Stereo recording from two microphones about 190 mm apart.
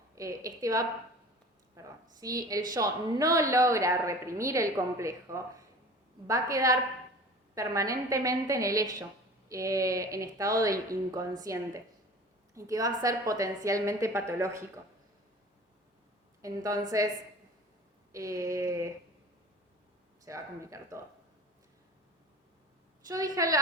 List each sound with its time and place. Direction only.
0.2 s a woman's voice: 15° right (ahead or behind)
16.4 s a woman's voice: 15° right (ahead or behind)
18.1 s a woman's voice: 15° right (ahead or behind)
20.2 s a woman's voice: 15° right (ahead or behind)
23.0 s a woman's voice: 20° right (ahead or behind)